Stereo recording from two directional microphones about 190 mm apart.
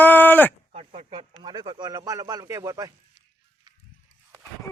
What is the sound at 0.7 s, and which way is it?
Speech, 30° right (ahead or behind).